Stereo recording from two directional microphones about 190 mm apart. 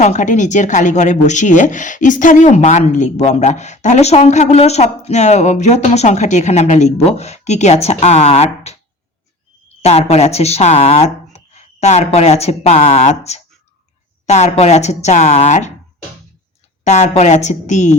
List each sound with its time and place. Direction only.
0.0 s speech: 40° left (ahead or behind)
16.8 s speech: 35° left (ahead or behind)